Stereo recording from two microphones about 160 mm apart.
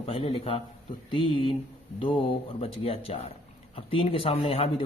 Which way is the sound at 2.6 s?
35° left (ahead or behind).